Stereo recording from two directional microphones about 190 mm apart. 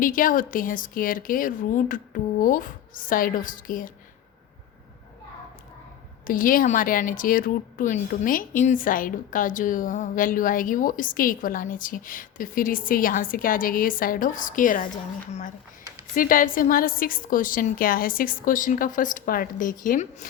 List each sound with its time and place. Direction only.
0.0 s speech: 45° left (ahead or behind)
6.2 s speech: 45° left (ahead or behind)